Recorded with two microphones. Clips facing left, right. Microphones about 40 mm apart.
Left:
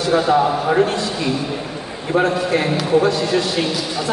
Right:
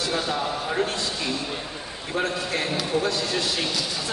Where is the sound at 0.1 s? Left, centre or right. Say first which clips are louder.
Left 15 dB; left.